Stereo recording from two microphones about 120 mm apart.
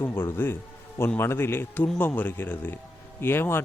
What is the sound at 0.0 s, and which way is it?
A man's voice, 20° left (ahead or behind).